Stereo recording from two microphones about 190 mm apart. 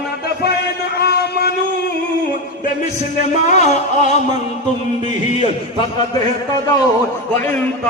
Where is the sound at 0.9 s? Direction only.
55° left (ahead or behind).